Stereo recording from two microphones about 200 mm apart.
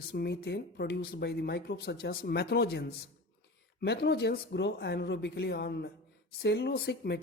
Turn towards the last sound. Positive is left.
turn(degrees=55)  # may be behind; listen again after turning